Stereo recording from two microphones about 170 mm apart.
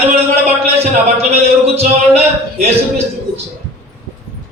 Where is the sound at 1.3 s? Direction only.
35° right (ahead or behind).